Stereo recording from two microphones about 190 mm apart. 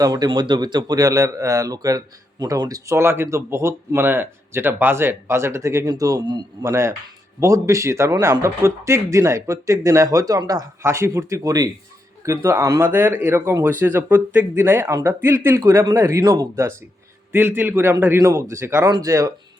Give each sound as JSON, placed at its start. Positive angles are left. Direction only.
{"t": 0.0, "sound": "speech", "side_deg": -20}